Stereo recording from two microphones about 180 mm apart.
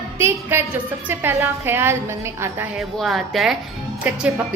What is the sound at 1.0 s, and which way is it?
Music, 10° right (ahead or behind).